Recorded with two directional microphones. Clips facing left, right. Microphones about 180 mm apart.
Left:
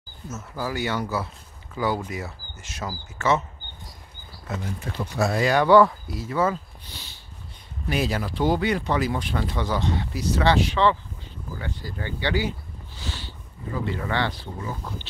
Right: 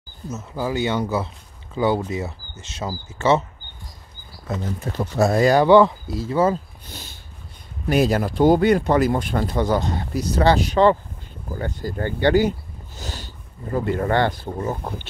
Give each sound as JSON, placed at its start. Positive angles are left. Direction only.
{"t": 0.3, "sound": "speech", "side_deg": -20}
{"t": 4.6, "sound": "speech", "side_deg": -40}
{"t": 5.7, "sound": "speech", "side_deg": -25}
{"t": 6.9, "sound": "snort", "side_deg": -45}
{"t": 7.9, "sound": "speech", "side_deg": -45}